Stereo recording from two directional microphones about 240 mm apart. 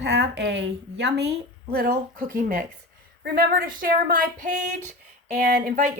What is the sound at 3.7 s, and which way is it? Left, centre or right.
Speech, right.